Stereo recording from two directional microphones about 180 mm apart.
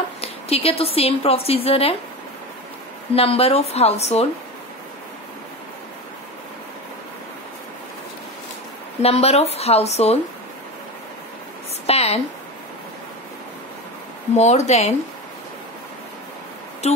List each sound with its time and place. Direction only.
0.2 s a woman's voice: 35° left (ahead or behind)
3.2 s a woman's voice: 35° left (ahead or behind)
9.0 s a woman's voice: 35° left (ahead or behind)
11.8 s a sound: 35° left (ahead or behind)
14.3 s a woman's voice: 40° left (ahead or behind)